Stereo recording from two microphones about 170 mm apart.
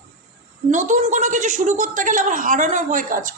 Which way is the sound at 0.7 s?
45° right (ahead or behind).